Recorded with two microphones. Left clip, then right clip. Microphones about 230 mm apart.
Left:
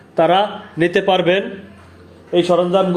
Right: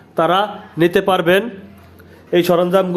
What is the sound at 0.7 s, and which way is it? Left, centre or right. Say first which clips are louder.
Speech: right 2 dB; right.